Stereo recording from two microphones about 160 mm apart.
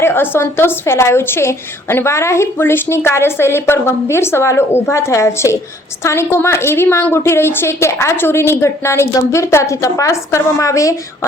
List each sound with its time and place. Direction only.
0.0 s a woman's voice: 15° left (ahead or behind)